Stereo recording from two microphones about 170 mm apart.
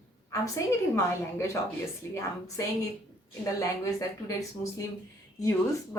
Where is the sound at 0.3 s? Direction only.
15° left (ahead or behind).